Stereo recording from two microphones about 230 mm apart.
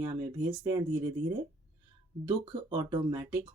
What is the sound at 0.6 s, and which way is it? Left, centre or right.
Speech, centre.